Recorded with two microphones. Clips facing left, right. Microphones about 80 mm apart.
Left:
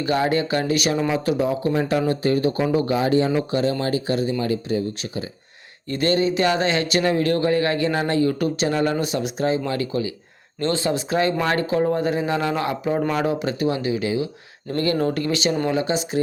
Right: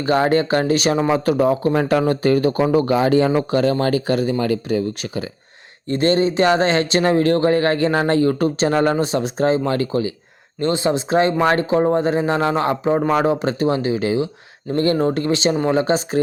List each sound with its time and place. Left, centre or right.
0.0 s speech: right
5.9 s speech: right
10.6 s speech: centre; by 16.2 s right